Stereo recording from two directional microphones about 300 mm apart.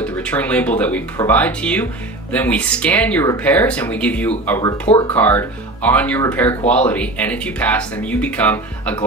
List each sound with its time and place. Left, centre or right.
0.0 s speech: centre
4.8 s speech: centre
5.1 s speech: centre